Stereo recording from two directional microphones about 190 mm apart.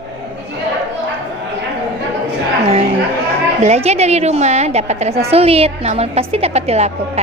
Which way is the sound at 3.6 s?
35° right (ahead or behind).